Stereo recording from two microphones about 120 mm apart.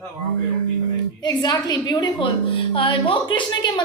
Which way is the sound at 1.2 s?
35° left (ahead or behind).